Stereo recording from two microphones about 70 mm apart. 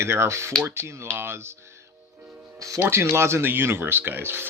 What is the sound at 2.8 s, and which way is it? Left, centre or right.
Speech, right.